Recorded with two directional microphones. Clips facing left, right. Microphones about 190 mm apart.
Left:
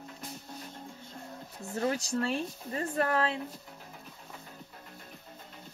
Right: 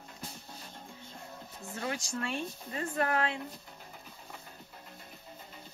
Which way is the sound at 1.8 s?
35° left (ahead or behind).